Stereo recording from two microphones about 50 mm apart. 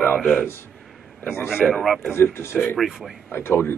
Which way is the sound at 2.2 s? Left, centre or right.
Left.